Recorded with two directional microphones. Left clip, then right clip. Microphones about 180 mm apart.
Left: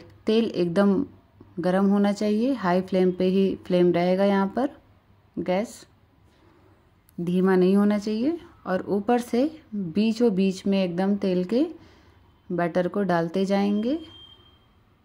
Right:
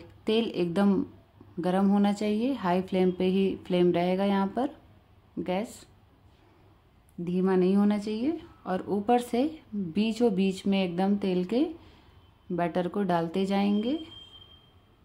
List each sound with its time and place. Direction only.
0.0 s a woman's voice: 20° left (ahead or behind)
7.2 s a woman's voice: 25° left (ahead or behind)